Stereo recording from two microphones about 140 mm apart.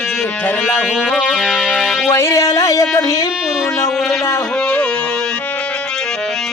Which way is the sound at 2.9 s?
25° left (ahead or behind).